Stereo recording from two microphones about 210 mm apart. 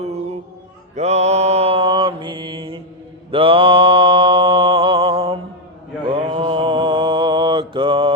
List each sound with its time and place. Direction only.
0.9 s mantra: 30° right (ahead or behind)